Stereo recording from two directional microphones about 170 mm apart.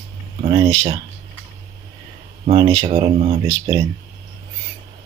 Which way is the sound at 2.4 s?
30° right (ahead or behind).